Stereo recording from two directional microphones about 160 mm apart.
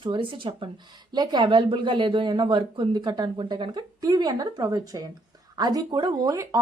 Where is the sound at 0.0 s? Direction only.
30° right (ahead or behind).